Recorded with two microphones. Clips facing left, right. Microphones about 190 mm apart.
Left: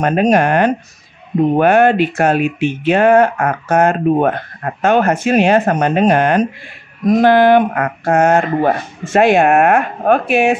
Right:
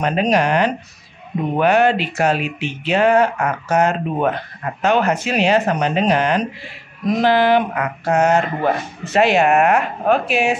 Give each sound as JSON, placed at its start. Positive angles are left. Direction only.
{"t": 0.0, "sound": "speech", "side_deg": 50}